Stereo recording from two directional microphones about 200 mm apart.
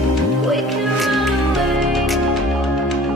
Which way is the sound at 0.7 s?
Centre (ahead or behind).